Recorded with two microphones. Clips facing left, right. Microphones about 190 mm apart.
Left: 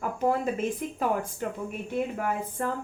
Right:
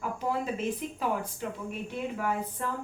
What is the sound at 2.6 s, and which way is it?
Speech, 50° left (ahead or behind).